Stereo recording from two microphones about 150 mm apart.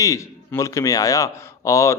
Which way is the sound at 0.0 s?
20° left (ahead or behind).